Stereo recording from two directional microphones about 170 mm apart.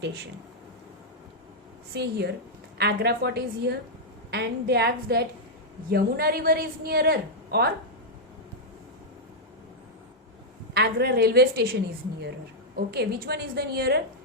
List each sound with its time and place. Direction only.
1.9 s a woman's voice: 75° right (ahead or behind)
10.8 s a woman's voice: 65° right (ahead or behind)